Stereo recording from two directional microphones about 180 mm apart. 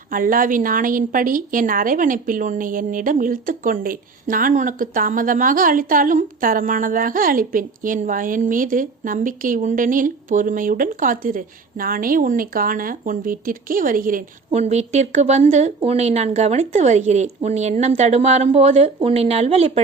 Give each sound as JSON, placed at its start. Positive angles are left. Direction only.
{"t": 0.1, "sound": "a woman's voice", "side_deg": -50}
{"t": 14.5, "sound": "speech", "side_deg": -40}